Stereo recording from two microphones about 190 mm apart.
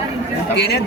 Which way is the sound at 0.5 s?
60° left (ahead or behind).